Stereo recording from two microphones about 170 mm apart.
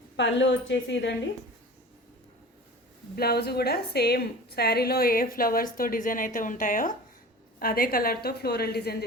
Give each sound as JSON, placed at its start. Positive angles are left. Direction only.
{"t": 0.2, "sound": "a woman's voice", "side_deg": 90}
{"t": 3.2, "sound": "a woman's voice", "side_deg": 70}